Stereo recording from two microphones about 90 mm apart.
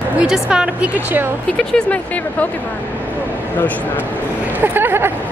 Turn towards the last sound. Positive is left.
turn(degrees=-25)  # may be behind; listen again after turning